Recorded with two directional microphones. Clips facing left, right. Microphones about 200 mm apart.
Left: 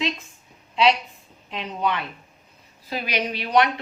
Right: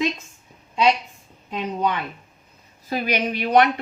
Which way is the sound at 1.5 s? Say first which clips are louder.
Right 2 dB; 45° right (ahead or behind).